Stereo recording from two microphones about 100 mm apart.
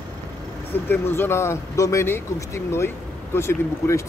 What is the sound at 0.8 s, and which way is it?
Speech, 20° left (ahead or behind).